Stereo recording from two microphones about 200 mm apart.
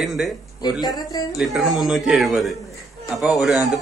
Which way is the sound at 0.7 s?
20° left (ahead or behind).